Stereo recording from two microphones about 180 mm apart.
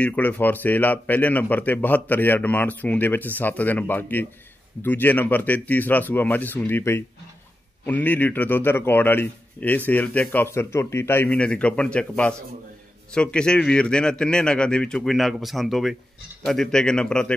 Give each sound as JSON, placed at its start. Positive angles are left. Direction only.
{"t": 0.0, "sound": "a man's voice", "side_deg": 10}